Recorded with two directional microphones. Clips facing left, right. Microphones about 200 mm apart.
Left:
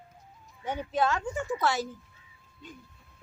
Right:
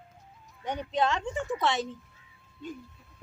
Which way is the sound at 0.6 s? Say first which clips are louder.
Even; 5° left (ahead or behind).